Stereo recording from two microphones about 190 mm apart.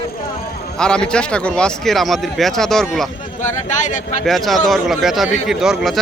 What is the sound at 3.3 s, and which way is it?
Speech, 40° left (ahead or behind).